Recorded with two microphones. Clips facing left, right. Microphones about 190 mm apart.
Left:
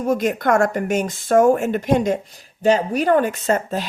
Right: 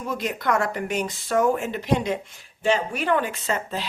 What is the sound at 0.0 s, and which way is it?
Speech, 45° left (ahead or behind).